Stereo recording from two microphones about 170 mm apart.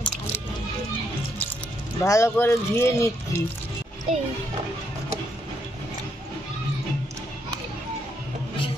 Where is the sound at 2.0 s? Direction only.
20° left (ahead or behind).